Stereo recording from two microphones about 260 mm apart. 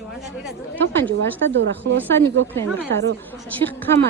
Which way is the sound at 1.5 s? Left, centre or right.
Right.